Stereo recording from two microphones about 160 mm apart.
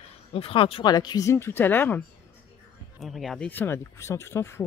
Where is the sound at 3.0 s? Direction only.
Centre (ahead or behind); by 4.7 s 15° left (ahead or behind).